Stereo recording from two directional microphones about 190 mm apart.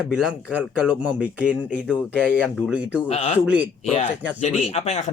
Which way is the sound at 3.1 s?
35° left (ahead or behind).